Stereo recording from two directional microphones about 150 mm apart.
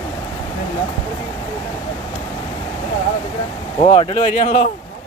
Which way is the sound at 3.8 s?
35° left (ahead or behind).